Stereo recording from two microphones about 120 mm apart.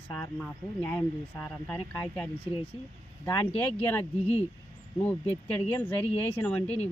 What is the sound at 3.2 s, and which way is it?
Speech, 20° left (ahead or behind).